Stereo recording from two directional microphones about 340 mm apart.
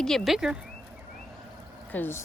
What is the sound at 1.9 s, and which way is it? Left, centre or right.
Speech, centre.